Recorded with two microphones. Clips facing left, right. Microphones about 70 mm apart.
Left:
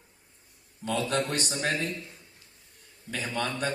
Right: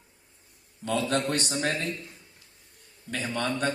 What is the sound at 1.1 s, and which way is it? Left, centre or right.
Speech, right.